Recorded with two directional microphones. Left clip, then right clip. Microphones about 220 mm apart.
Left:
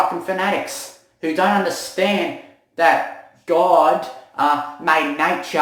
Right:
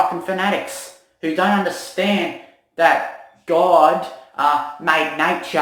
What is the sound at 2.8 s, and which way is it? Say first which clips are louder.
Speech: even; centre (ahead or behind).